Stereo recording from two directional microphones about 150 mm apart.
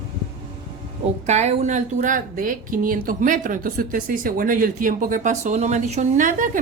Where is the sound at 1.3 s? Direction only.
50° right (ahead or behind).